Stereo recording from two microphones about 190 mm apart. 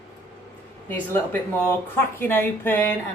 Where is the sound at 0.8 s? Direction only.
10° left (ahead or behind).